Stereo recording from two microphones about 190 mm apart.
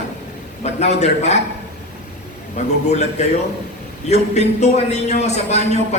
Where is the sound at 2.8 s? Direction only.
35° left (ahead or behind).